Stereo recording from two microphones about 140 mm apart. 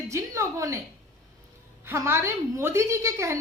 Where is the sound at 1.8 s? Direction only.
20° right (ahead or behind).